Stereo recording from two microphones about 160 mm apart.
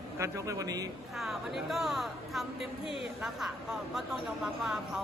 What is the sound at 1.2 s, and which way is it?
A woman's voice, centre (ahead or behind).